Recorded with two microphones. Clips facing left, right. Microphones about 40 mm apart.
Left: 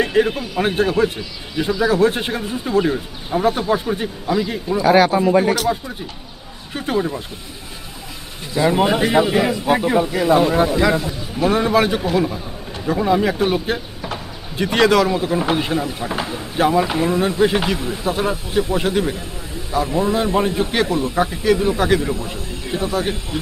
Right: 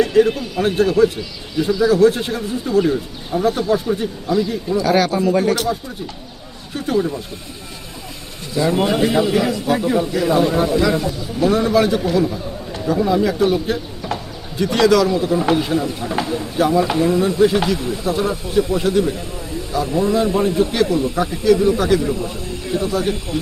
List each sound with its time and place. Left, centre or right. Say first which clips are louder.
0.0 s a man's voice: right 3 dB; left
6.7 s a man's voice: right 2 dB; left
8.5 s a man's voice: left 1 dB; left
19.9 s a man's voice: right 2 dB; centre